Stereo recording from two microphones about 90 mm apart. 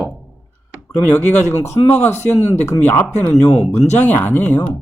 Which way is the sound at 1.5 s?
30° left (ahead or behind).